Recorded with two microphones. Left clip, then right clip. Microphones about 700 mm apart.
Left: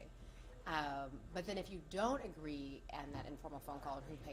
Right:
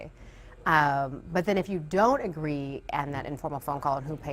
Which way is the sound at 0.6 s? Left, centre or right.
Right.